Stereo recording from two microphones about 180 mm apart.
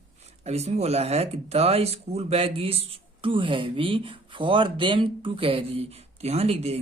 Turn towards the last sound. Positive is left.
turn(degrees=-35)  # may be behind; listen again after turning